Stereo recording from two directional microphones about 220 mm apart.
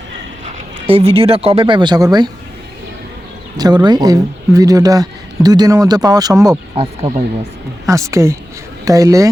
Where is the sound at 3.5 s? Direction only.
20° right (ahead or behind).